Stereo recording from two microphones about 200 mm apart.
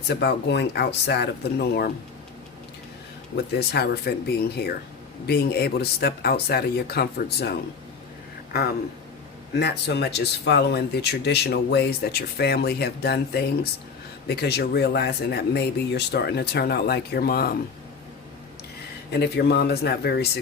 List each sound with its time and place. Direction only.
0.2 s speech: 55° left (ahead or behind)
3.3 s speech: 55° left (ahead or behind)
9.6 s speech: 55° left (ahead or behind)
19.1 s speech: 55° left (ahead or behind)